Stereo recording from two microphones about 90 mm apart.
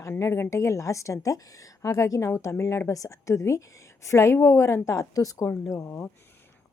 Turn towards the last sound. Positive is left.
turn(degrees=30)  # may be behind; listen again after turning